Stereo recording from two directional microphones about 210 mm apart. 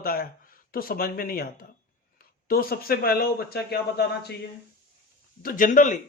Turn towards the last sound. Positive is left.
turn(degrees=40)  # may be behind; listen again after turning